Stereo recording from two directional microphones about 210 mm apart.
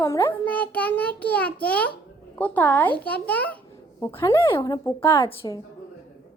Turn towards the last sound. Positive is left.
turn(degrees=10)  # may be behind; listen again after turning